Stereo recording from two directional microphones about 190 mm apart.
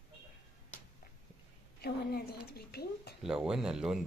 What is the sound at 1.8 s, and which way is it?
A woman's voice, 55° left (ahead or behind).